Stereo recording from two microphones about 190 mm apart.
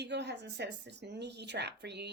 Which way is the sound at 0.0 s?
65° right (ahead or behind).